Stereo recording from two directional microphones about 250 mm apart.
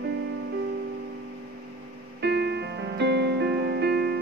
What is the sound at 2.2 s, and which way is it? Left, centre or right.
Music, right.